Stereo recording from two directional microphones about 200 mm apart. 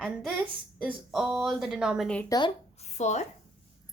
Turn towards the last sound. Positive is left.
turn(degrees=35)  # may be behind; listen again after turning